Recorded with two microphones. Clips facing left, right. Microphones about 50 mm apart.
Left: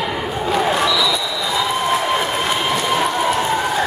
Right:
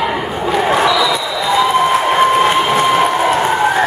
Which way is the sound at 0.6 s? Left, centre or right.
Right.